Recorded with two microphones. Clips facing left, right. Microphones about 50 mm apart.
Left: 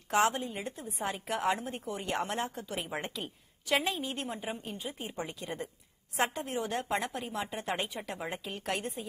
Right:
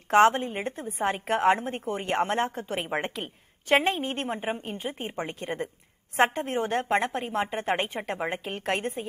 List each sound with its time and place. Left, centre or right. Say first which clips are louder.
0.1 s a woman's voice: right 8 dB; right